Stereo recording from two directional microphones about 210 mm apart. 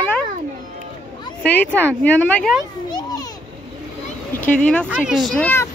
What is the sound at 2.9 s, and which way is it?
Children playing, 20° left (ahead or behind).